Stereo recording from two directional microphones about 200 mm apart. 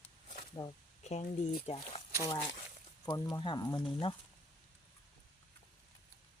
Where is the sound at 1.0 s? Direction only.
35° left (ahead or behind).